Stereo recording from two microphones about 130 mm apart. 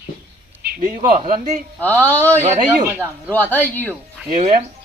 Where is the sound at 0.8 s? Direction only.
90° right.